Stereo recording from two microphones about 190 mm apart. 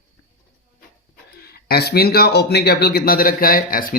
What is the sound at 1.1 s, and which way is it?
Speech, 55° left (ahead or behind).